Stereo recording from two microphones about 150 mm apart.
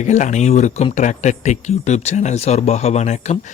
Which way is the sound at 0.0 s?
55° left (ahead or behind).